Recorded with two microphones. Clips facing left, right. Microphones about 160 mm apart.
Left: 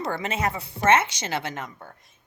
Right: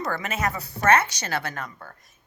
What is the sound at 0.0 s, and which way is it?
A woman's voice, 25° left (ahead or behind).